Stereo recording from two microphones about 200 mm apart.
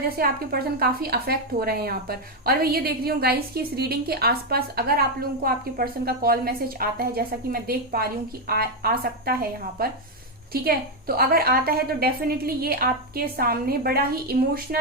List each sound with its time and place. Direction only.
0.2 s a woman's voice: 50° right (ahead or behind)